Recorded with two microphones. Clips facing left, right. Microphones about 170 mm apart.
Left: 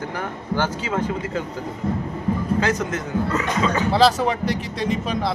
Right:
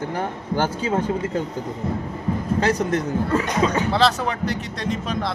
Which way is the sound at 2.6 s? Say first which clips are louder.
Right 2 dB; 35° right (ahead or behind).